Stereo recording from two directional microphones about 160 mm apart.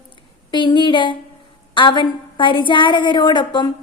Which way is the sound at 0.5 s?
30° left (ahead or behind).